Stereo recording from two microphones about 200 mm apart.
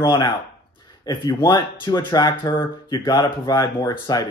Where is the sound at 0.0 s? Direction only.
20° left (ahead or behind).